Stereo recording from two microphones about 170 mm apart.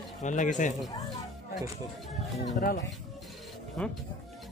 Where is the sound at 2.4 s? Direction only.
50° left (ahead or behind).